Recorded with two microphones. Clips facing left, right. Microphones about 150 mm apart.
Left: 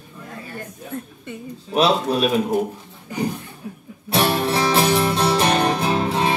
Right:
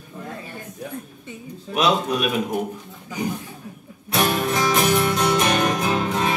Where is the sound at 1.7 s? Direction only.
30° left (ahead or behind).